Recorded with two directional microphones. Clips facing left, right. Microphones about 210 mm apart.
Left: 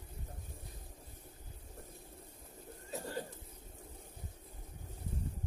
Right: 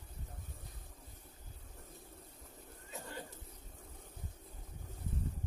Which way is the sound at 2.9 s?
35° left (ahead or behind).